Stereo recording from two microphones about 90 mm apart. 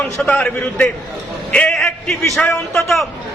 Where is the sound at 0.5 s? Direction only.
20° left (ahead or behind).